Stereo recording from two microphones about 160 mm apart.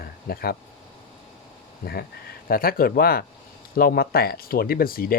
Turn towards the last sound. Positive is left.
turn(degrees=65)  # may be behind; listen again after turning